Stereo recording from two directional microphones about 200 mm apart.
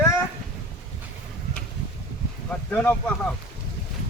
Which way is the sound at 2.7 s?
5° left (ahead or behind).